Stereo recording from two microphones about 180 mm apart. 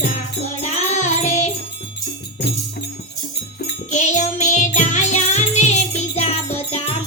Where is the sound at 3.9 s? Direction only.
40° left (ahead or behind).